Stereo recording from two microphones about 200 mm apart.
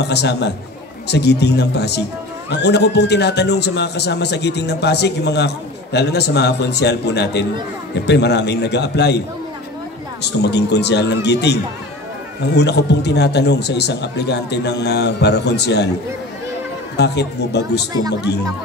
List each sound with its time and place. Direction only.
0.0 s speech: 55° left (ahead or behind)
10.2 s speech: 55° left (ahead or behind)
16.9 s speech: 55° left (ahead or behind)